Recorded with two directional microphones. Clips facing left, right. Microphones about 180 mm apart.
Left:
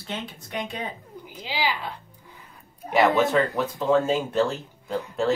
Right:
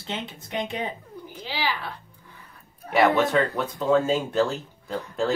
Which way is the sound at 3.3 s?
Centre (ahead or behind).